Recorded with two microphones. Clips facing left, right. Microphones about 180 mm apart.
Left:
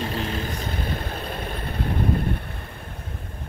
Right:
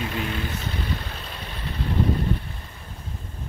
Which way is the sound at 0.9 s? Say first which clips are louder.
Left 3 dB; 50° left (ahead or behind).